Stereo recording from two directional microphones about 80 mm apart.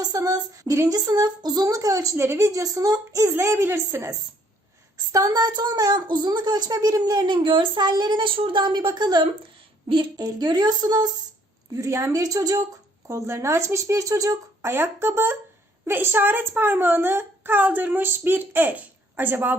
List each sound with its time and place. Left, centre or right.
0.0 s a sound: right
0.9 s speech: right
3.2 s speech: right
5.1 s speech: right
9.9 s a woman's voice: right
10.2 s speech: right
11.8 s speech: right
14.6 s a woman's voice: right